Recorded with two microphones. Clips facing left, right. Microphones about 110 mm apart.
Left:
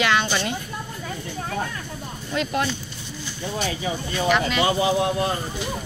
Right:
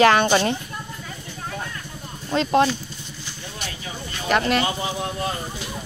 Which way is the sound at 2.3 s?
30° right (ahead or behind).